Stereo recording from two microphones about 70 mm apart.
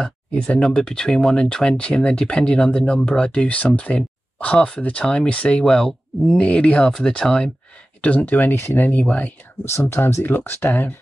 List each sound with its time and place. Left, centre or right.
0.0 s speech: centre
8.0 s speech: left
9.7 s speech: left